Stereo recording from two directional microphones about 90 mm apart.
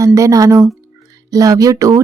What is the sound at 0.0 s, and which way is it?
Speech, 35° right (ahead or behind).